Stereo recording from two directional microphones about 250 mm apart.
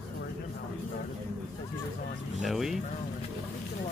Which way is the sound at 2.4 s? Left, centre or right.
Centre.